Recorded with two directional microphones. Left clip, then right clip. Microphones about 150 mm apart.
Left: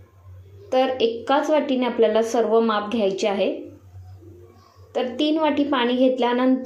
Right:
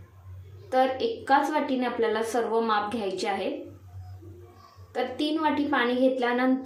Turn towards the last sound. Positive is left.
turn(degrees=15)  # may be behind; listen again after turning